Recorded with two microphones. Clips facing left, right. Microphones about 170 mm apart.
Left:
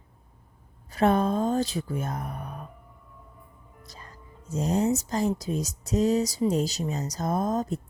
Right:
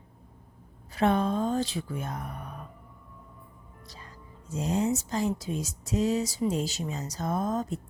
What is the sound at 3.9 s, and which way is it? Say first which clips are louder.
Speech: left 1 dB; 45° left (ahead or behind).